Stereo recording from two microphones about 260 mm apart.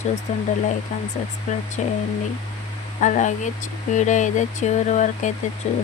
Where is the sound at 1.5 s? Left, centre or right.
Left.